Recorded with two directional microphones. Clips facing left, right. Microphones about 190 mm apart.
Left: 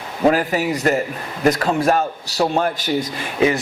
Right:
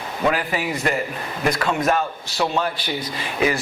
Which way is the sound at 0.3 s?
40° left (ahead or behind).